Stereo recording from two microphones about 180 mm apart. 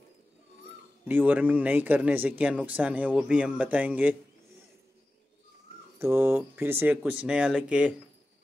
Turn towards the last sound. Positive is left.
turn(degrees=-5)  # may be behind; listen again after turning